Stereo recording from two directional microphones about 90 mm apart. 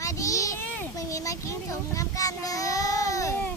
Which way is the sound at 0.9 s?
40° left (ahead or behind).